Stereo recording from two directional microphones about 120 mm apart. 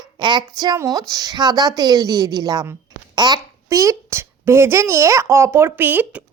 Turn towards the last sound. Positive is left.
turn(degrees=-15)  # may be behind; listen again after turning